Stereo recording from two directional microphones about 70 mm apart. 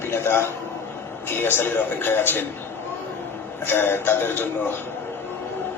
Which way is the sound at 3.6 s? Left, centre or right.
Left.